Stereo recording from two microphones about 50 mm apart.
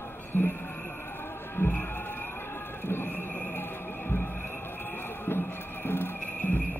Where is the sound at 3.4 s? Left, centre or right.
Left.